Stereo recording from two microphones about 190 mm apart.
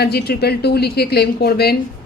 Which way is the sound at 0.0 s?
55° left (ahead or behind).